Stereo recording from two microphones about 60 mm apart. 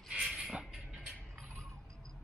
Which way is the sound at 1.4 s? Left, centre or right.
Centre.